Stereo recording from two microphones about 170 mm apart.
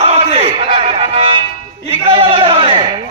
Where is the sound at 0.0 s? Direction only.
35° right (ahead or behind).